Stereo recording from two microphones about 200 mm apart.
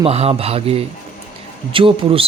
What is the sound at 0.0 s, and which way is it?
Speech, 30° right (ahead or behind).